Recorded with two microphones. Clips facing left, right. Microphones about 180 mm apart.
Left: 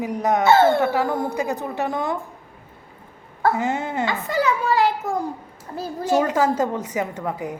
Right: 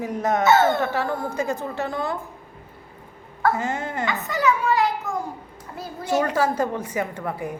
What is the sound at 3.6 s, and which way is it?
Speech, 15° left (ahead or behind).